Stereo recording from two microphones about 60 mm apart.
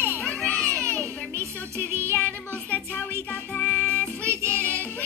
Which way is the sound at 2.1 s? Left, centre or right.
Left.